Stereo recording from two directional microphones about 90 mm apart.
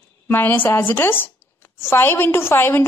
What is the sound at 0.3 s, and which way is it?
A woman's voice, 20° left (ahead or behind).